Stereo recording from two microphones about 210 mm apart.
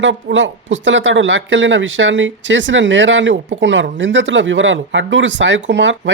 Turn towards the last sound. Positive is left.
turn(degrees=-60)  # may be behind; listen again after turning